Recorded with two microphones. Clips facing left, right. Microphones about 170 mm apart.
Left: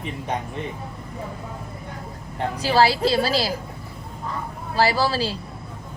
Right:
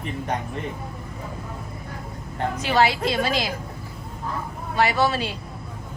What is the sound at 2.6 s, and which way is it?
Speech, 35° left (ahead or behind).